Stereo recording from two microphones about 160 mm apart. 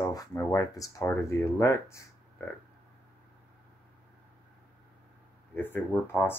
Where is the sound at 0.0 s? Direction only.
20° left (ahead or behind).